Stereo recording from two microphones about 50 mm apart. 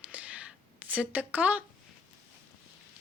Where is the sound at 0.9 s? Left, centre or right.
Right.